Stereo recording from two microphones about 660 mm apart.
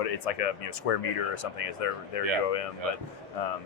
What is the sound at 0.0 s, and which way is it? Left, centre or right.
Speech, left.